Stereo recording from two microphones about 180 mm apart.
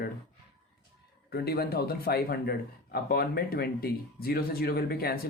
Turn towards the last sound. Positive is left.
turn(degrees=60)  # may be behind; listen again after turning